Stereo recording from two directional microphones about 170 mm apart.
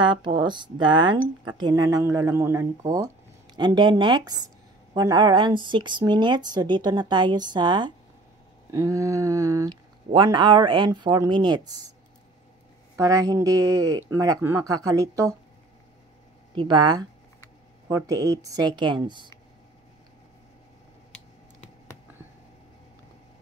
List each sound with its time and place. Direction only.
0.0 s speech: 25° right (ahead or behind)
12.9 s speech: 20° right (ahead or behind)
16.5 s speech: 25° right (ahead or behind)